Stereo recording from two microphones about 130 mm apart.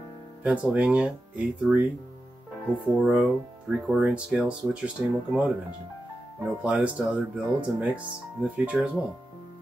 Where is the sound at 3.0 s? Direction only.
10° right (ahead or behind).